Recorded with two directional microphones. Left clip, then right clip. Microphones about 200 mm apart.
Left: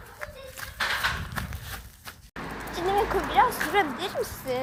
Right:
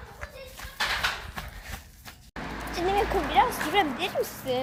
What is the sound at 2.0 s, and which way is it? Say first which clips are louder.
Vehicle: left 3 dB; 20° left (ahead or behind).